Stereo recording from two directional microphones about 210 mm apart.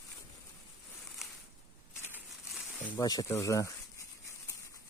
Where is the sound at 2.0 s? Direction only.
10° right (ahead or behind).